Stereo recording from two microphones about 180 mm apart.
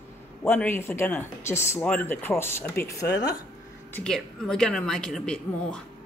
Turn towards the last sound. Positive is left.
turn(degrees=5)  # may be behind; listen again after turning